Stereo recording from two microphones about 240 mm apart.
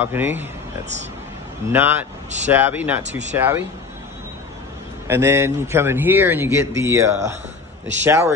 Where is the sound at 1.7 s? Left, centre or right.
Centre.